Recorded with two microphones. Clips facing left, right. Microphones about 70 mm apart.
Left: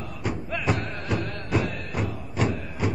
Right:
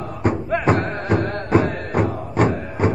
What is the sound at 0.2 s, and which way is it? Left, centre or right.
Music, right.